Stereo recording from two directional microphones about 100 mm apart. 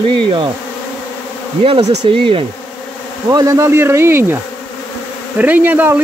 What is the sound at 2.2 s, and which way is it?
Bee, 65° right (ahead or behind).